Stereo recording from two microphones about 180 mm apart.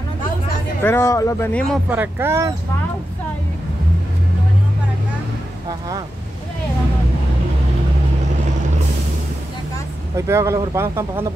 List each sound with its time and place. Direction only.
0.8 s speech: 15° left (ahead or behind)
1.9 s speech: 10° right (ahead or behind)
5.7 s speech: 20° right (ahead or behind)
10.1 s speech: 15° right (ahead or behind)